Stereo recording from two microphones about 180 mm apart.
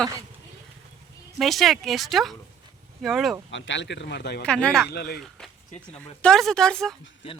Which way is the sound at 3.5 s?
90° left.